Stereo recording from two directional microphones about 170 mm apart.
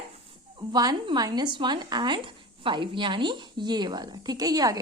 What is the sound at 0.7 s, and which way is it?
Speech, 25° right (ahead or behind).